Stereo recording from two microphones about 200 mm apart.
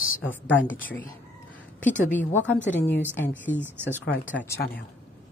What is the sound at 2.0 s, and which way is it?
A woman's voice, 10° left (ahead or behind).